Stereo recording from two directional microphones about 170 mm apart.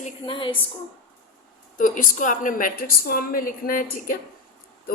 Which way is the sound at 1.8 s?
50° left (ahead or behind).